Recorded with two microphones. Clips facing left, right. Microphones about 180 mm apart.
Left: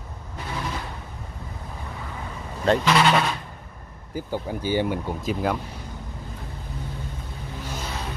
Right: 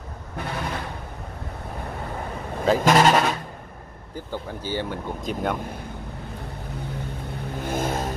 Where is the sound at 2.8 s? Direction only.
45° right (ahead or behind).